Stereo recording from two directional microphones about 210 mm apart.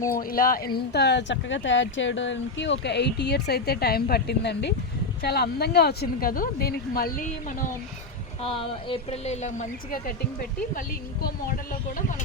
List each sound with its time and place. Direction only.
0.2 s speech: 40° left (ahead or behind)
0.9 s speech: 55° left (ahead or behind)
8.4 s a woman's voice: 25° left (ahead or behind); by 12.0 s 45° left (ahead or behind)